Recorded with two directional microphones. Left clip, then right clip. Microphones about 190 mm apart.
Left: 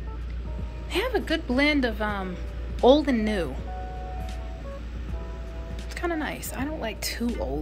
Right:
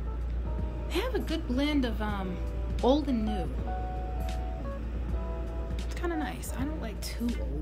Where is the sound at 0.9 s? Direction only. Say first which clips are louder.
Left 6 dB; 5° right (ahead or behind).